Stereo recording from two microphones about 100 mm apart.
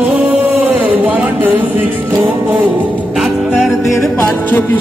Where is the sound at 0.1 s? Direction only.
15° right (ahead or behind).